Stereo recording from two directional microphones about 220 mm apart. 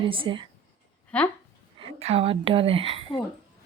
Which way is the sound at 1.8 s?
25° right (ahead or behind).